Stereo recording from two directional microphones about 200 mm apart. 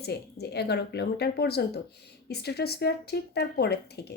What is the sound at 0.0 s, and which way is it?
Speech, 55° left (ahead or behind).